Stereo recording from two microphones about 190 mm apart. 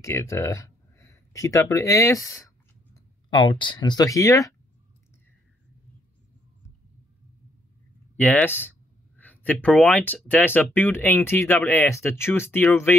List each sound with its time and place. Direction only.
0.0 s speech: 15° left (ahead or behind)
8.2 s speech: 5° left (ahead or behind)